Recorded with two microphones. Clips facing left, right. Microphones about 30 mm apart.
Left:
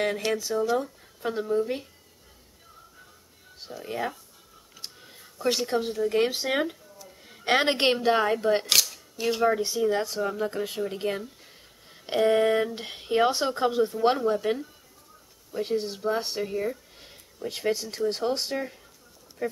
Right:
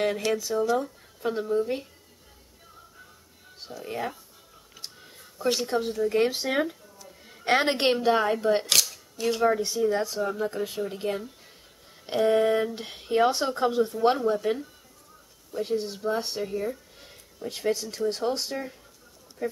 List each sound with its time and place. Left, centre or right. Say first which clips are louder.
0.0 s speech: right 1 dB; centre
3.6 s speech: left 1 dB; centre
8.9 s camera: even; centre
9.7 s speech: even; centre
17.0 s a sound: left 3 dB; centre
17.8 s speech: even; centre